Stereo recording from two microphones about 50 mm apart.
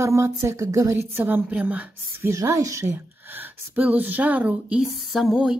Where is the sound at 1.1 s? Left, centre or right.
Right.